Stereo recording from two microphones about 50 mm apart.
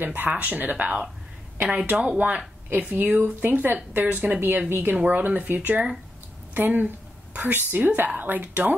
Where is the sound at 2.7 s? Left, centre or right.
Right.